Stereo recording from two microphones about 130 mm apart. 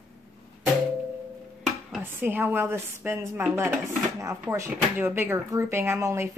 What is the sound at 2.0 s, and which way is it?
Speech, 15° right (ahead or behind).